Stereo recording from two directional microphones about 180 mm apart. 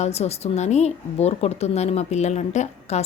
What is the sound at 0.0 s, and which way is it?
A woman's voice, 35° left (ahead or behind).